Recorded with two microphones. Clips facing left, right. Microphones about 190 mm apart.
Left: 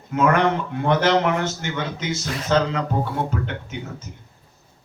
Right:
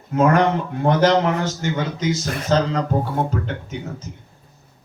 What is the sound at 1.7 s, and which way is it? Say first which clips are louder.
Speech: right 4 dB; 45° right (ahead or behind).